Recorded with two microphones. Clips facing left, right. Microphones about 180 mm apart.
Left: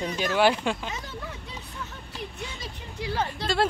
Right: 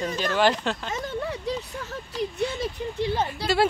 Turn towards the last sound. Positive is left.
turn(degrees=-5)  # may be behind; listen again after turning